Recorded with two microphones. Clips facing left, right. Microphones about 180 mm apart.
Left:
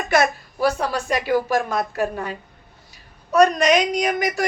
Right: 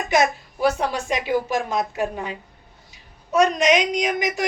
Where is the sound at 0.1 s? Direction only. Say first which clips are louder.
Left 1 dB; 15° right (ahead or behind).